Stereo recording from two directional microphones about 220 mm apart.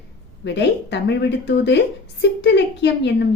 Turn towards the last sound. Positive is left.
turn(degrees=50)  # may be behind; listen again after turning